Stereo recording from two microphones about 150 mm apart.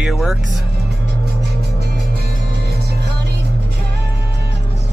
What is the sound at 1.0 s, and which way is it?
Music, 90° right.